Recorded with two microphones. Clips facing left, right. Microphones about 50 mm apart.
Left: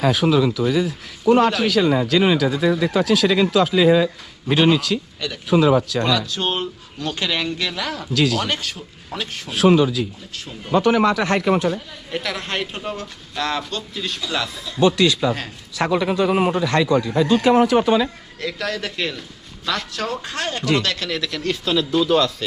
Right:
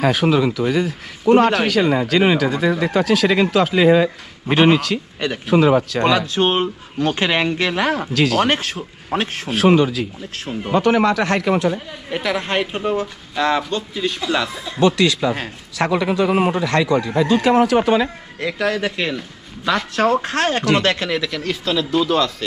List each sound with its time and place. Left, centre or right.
0.0 s a man's voice: right
1.6 s speech: right
2.2 s speech: right
5.5 s speech: right
6.0 s speech: right
9.5 s a man's voice: right
12.1 s speech: centre
14.5 s a man's voice: right
15.9 s a man's voice: right
18.3 s speech: right
20.0 s speech: right
20.2 s speech: right
21.2 s speech: centre
21.9 s speech: centre